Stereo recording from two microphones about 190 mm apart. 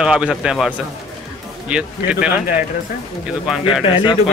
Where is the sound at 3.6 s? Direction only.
25° left (ahead or behind).